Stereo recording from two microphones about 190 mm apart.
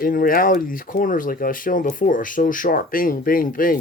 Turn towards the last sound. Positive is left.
turn(degrees=45)  # may be behind; listen again after turning